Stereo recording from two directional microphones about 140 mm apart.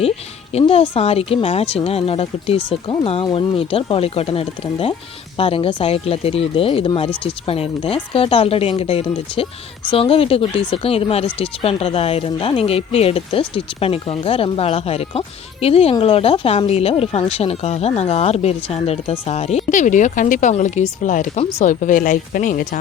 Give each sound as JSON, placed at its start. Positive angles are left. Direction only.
{"t": 0.5, "sound": "a woman's voice", "side_deg": 45}